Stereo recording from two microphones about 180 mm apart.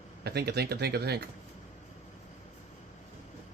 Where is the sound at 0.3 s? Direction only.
65° right (ahead or behind).